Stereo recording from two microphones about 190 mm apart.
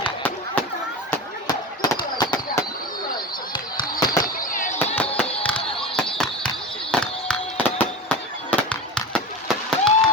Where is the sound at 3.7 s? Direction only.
20° left (ahead or behind).